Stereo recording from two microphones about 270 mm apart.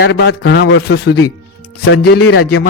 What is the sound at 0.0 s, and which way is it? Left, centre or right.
A man's voice, left.